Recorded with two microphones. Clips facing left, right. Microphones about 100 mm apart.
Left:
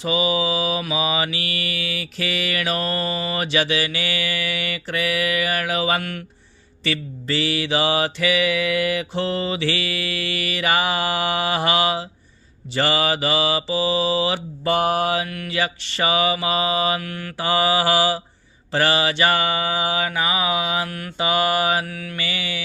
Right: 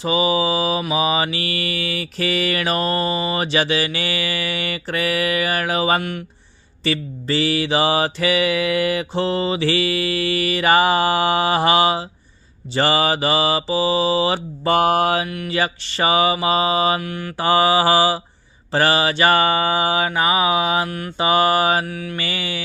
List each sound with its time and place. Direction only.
0.0 s mantra: 35° right (ahead or behind)
6.0 s mantra: 20° right (ahead or behind)
6.8 s mantra: 35° right (ahead or behind)
15.2 s mantra: 20° right (ahead or behind)
15.4 s mantra: 35° right (ahead or behind)
17.0 s mantra: 20° right (ahead or behind)
17.3 s mantra: 40° right (ahead or behind)
22.2 s mantra: 40° right (ahead or behind)